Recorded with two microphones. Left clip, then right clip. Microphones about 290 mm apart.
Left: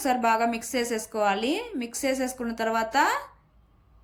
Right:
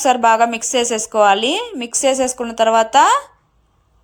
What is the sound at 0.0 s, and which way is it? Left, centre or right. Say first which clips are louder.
Speech: right 11 dB; right.